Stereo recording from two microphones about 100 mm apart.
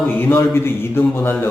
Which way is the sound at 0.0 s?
20° left (ahead or behind).